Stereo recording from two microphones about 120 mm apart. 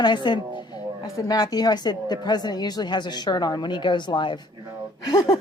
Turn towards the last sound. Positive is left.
turn(degrees=35)  # may be behind; listen again after turning